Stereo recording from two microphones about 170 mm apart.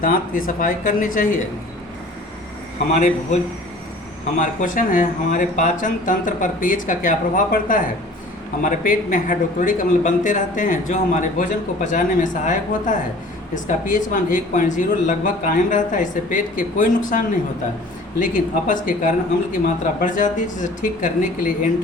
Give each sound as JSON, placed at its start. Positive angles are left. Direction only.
{"t": 0.0, "sound": "a man's voice", "side_deg": 55}
{"t": 2.9, "sound": "a man's voice", "side_deg": 45}